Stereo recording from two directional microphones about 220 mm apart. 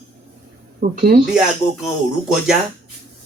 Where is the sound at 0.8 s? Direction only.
40° right (ahead or behind).